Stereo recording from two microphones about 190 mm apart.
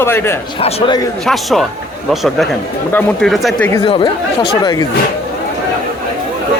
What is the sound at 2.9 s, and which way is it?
Speech, centre (ahead or behind).